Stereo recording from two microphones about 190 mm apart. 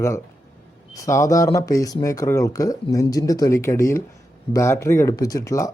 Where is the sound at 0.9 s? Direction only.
15° left (ahead or behind).